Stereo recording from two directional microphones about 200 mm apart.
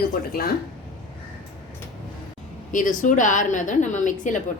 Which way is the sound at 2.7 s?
40° left (ahead or behind).